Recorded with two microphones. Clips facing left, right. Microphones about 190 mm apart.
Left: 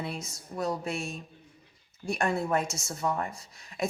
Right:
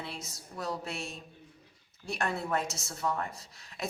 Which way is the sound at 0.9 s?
50° left (ahead or behind).